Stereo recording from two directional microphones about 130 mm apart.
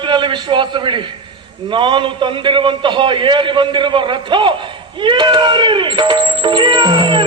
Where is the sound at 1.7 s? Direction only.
40° right (ahead or behind).